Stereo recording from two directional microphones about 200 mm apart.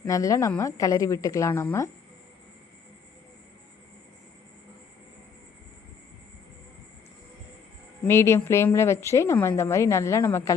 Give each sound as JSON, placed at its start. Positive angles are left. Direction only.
{"t": 0.0, "sound": "a woman's voice", "side_deg": 15}
{"t": 8.0, "sound": "a woman's voice", "side_deg": 15}